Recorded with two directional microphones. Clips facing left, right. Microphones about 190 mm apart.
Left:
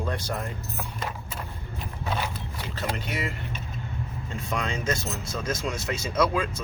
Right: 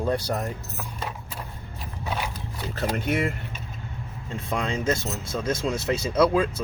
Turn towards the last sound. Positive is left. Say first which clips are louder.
# right 4 dB
turn(degrees=-35)  # may be behind; listen again after turning